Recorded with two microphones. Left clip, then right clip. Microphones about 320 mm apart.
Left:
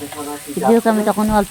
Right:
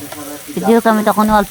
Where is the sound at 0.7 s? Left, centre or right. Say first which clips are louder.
Right 5 dB; right.